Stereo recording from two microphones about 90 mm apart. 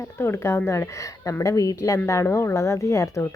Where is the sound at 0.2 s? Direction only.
30° left (ahead or behind).